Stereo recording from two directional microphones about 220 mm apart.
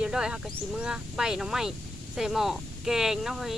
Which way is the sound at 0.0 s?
5° right (ahead or behind).